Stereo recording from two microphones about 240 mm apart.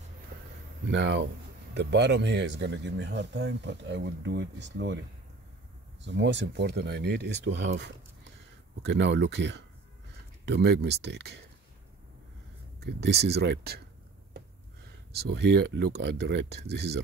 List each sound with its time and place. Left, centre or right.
0.8 s speech: right
6.0 s speech: right
12.8 s speech: right
15.1 s speech: right